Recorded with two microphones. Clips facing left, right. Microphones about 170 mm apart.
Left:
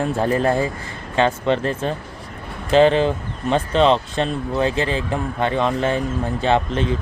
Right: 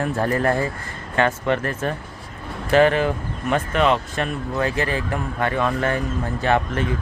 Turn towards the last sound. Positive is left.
turn(degrees=25)  # may be behind; listen again after turning